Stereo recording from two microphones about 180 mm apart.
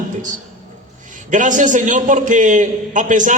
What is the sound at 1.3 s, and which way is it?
A man's voice, 45° right (ahead or behind).